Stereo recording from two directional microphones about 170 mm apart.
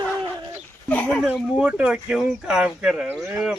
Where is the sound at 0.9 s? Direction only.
10° left (ahead or behind).